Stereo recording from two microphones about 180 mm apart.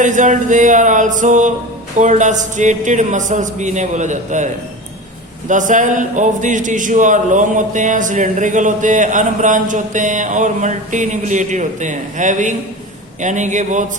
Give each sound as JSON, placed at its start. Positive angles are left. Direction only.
{"t": 0.0, "sound": "a man's voice", "side_deg": -45}